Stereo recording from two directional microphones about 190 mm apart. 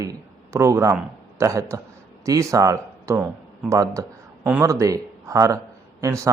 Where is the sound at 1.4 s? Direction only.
15° right (ahead or behind).